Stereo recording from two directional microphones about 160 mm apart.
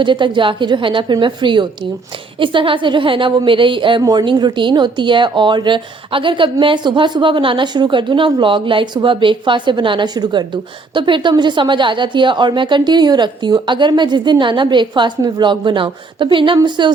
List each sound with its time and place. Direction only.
0.0 s a woman's voice: 30° right (ahead or behind)